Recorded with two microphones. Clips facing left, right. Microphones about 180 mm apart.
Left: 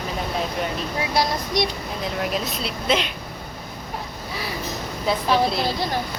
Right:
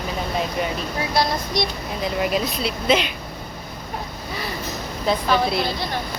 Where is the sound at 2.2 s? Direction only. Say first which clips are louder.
Right 4 dB; centre (ahead or behind).